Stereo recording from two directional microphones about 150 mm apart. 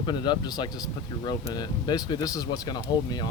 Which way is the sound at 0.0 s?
30° left (ahead or behind).